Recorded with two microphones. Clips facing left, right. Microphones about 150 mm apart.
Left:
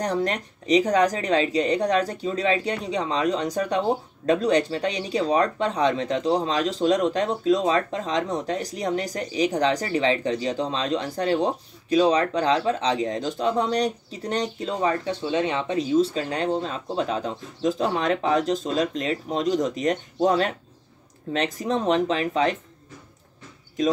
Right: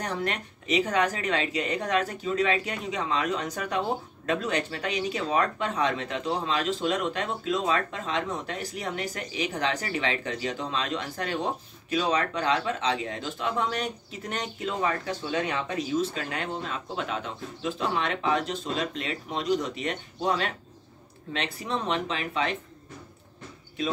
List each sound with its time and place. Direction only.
0.0 s speech: 35° left (ahead or behind)